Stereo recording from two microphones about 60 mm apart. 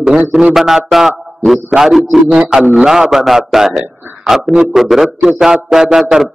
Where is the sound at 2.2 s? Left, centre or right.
Centre.